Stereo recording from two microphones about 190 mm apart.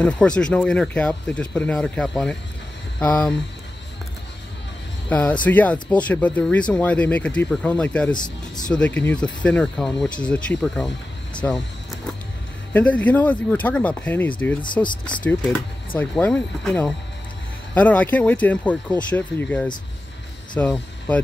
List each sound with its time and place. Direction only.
0.0 s speech: 5° left (ahead or behind)
5.1 s speech: 5° left (ahead or behind)
8.1 s speech: 25° left (ahead or behind)
8.6 s speech: 5° left (ahead or behind)
11.4 s speech: 10° left (ahead or behind)
12.7 s speech: 5° left (ahead or behind)
14.6 s speech: 25° left (ahead or behind)
16.0 s speech: 10° left (ahead or behind)